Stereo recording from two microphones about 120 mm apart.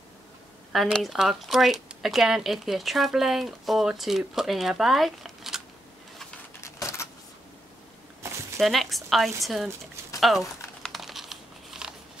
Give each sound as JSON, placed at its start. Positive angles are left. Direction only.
{"t": 0.9, "sound": "speech", "side_deg": 0}
{"t": 6.6, "sound": "a sound", "side_deg": 25}
{"t": 8.5, "sound": "speech", "side_deg": 0}
{"t": 10.2, "sound": "crumpling", "side_deg": 0}